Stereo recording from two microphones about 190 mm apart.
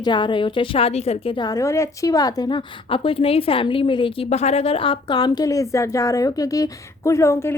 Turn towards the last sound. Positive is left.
turn(degrees=15)  # may be behind; listen again after turning